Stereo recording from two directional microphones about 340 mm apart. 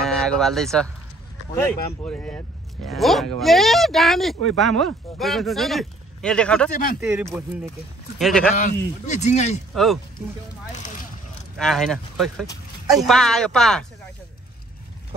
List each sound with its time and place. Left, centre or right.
0.0 s speech: centre
2.0 s speech: centre
6.7 s speech: left
7.0 s speech: centre
8.5 s speech: left
11.5 s speech: centre